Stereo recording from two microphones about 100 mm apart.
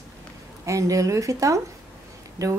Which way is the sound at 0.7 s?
35° right (ahead or behind).